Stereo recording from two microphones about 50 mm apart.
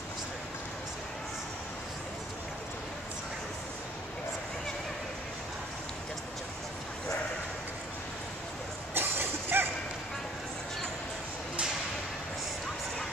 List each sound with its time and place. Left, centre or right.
8.9 s vehicle: right